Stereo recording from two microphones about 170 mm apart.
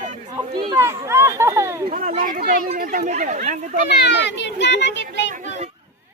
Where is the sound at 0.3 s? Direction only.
25° right (ahead or behind).